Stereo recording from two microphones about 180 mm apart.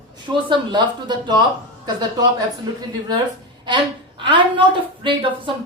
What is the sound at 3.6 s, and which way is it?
A woman's voice, 25° right (ahead or behind).